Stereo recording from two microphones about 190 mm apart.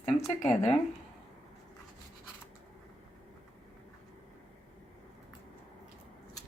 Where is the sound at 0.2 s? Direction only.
10° left (ahead or behind).